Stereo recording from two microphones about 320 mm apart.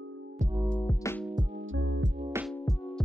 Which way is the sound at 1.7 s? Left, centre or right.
Right.